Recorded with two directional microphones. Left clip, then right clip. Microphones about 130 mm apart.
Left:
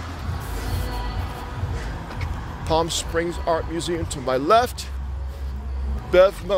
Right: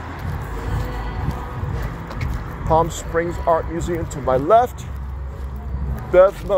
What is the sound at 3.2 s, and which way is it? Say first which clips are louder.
Speech: right 5 dB; 60° left (ahead or behind).